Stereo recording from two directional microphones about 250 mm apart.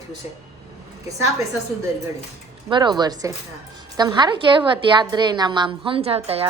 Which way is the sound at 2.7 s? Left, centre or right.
Centre.